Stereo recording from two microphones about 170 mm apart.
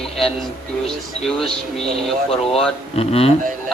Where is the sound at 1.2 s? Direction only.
Centre (ahead or behind).